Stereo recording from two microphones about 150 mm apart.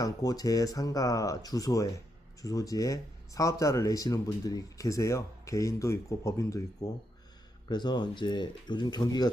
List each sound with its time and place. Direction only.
0.0 s speech: 25° left (ahead or behind)